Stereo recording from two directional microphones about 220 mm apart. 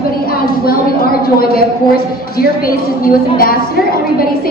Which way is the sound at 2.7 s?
40° left (ahead or behind).